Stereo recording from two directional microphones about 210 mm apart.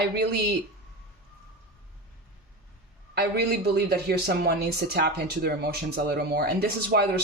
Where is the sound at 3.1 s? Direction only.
50° right (ahead or behind).